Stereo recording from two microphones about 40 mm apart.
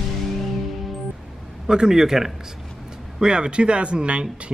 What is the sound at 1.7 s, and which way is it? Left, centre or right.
Speech, centre.